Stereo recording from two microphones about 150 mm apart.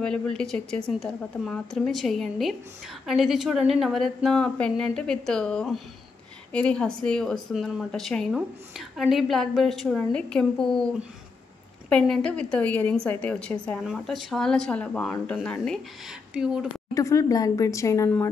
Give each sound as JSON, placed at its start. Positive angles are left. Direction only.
{"t": 0.0, "sound": "a woman's voice", "side_deg": 5}
{"t": 11.9, "sound": "a woman's voice", "side_deg": 5}
{"t": 16.9, "sound": "speech", "side_deg": 20}